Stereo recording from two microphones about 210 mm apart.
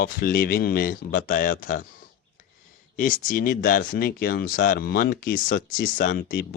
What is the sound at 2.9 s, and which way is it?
Speech, 40° left (ahead or behind).